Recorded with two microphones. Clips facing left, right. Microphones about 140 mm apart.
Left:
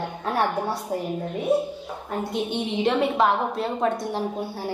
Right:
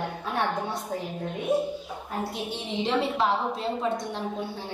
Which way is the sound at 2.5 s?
60° left (ahead or behind).